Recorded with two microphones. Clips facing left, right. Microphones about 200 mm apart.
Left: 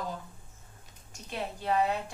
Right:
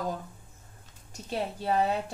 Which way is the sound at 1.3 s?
35° right (ahead or behind).